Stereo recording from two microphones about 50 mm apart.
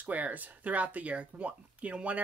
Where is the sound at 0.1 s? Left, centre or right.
Right.